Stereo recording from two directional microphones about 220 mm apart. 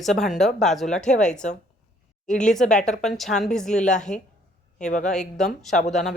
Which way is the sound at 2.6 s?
35° left (ahead or behind).